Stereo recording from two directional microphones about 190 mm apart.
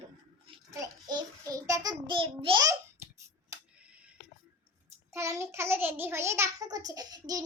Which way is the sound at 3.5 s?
15° right (ahead or behind).